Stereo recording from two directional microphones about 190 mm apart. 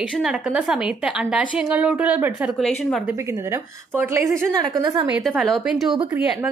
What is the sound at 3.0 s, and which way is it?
A woman's voice, 15° right (ahead or behind).